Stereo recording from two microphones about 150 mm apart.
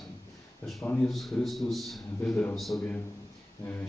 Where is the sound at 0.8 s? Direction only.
10° left (ahead or behind).